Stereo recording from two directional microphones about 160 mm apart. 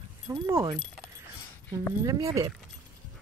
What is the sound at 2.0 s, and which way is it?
Speech, 20° right (ahead or behind).